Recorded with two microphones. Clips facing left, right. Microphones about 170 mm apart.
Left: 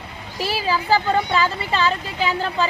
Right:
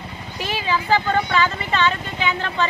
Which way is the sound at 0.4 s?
35° left (ahead or behind).